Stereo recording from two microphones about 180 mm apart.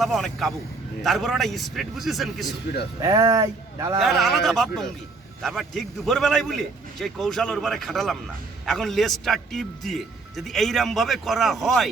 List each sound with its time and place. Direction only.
0.0 s a man's voice: centre (ahead or behind)
3.0 s speech: 20° right (ahead or behind)
4.4 s a man's voice: centre (ahead or behind)